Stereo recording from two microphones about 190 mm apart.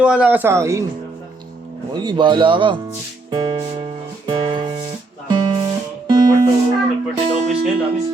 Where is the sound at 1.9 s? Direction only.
25° right (ahead or behind).